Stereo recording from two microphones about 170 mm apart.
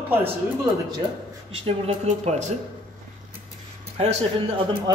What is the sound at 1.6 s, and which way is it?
Speech, 35° right (ahead or behind).